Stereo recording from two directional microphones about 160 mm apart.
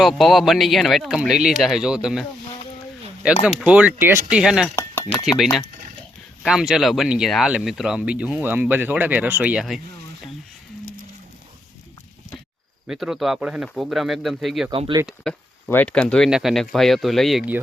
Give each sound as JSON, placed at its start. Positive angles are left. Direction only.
{"t": 0.0, "sound": "speech", "side_deg": 0}
{"t": 3.2, "sound": "speech", "side_deg": -5}
{"t": 4.7, "sound": "chink", "side_deg": 15}
{"t": 5.2, "sound": "speech", "side_deg": 0}
{"t": 12.9, "sound": "speech", "side_deg": -5}
{"t": 14.7, "sound": "speech", "side_deg": -30}
{"t": 15.0, "sound": "speech", "side_deg": 5}